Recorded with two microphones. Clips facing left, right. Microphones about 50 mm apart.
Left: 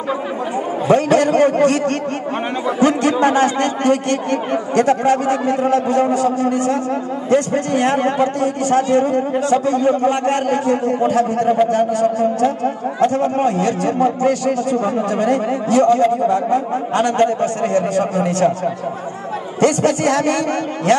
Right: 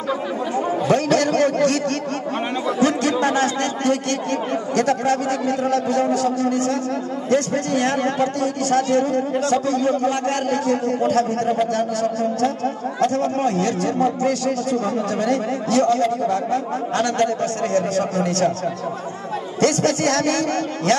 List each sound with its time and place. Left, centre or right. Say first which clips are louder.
0.8 s a man's voice: left 6 dB; left
19.6 s a man's voice: left 3 dB; left